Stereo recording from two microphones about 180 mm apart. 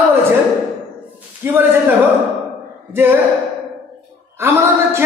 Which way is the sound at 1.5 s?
10° right (ahead or behind).